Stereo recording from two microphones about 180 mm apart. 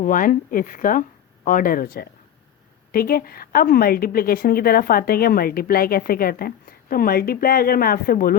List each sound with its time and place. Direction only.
0.0 s a woman's voice: 50° left (ahead or behind)